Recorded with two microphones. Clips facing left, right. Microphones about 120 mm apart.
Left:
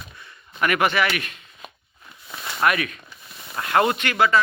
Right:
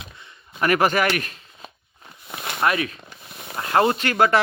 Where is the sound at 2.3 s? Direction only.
55° right (ahead or behind).